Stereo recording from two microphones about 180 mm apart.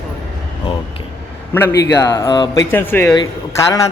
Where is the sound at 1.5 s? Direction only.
15° left (ahead or behind).